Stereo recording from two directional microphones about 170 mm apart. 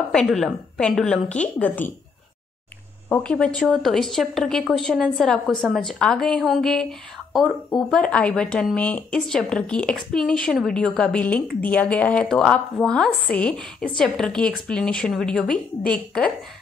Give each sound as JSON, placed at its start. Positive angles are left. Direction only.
{"t": 0.1, "sound": "speech", "side_deg": 5}
{"t": 3.1, "sound": "speech", "side_deg": 5}